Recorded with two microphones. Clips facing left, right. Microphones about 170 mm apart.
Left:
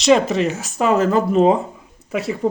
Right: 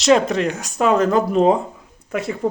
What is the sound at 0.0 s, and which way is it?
Speech, centre (ahead or behind).